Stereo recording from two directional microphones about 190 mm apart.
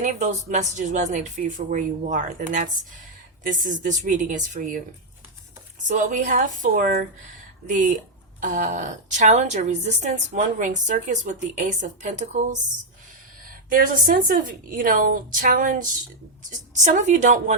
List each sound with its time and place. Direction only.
0.0 s a woman's voice: 40° right (ahead or behind)
6.0 s a woman's voice: 40° right (ahead or behind)
13.7 s a woman's voice: 45° right (ahead or behind)